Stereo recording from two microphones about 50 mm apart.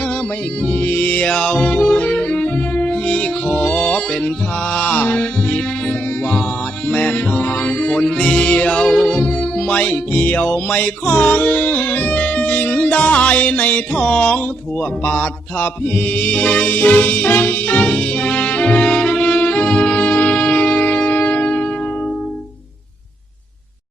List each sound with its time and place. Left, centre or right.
0.6 s music: left
12.2 s music: left